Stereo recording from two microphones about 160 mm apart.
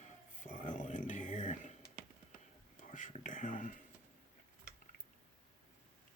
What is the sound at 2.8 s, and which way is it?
Whispering, 50° left (ahead or behind).